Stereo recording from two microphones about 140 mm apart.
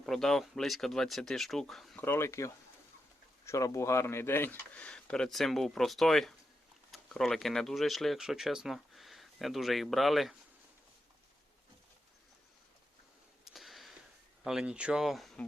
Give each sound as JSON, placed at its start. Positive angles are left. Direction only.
{"t": 0.0, "sound": "speech", "side_deg": 5}
{"t": 2.0, "sound": "speech", "side_deg": 15}
{"t": 13.4, "sound": "a sound", "side_deg": 0}
{"t": 14.4, "sound": "speech", "side_deg": -5}